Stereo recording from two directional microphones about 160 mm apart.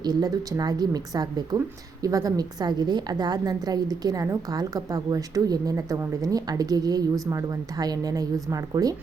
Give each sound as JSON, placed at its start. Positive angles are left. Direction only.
{"t": 0.0, "sound": "a woman's voice", "side_deg": -25}